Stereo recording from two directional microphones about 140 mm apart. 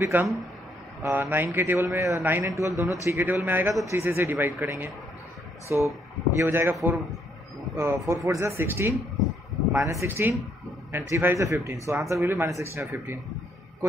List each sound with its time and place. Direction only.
0.0 s a man's voice: 15° right (ahead or behind)